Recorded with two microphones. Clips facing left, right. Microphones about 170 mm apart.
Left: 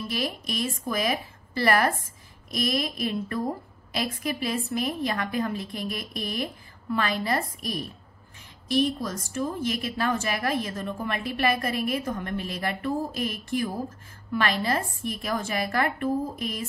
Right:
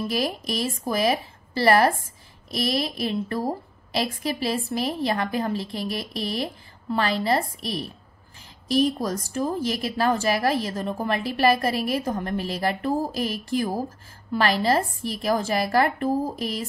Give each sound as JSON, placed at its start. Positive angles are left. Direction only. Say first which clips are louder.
{"t": 0.1, "sound": "a woman's voice", "louder": "right 4 dB", "side_deg": -35}